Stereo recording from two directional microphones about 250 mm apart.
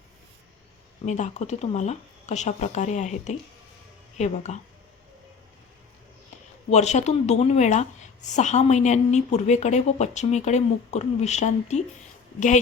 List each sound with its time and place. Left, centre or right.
1.0 s a woman's voice: left
6.7 s a woman's voice: left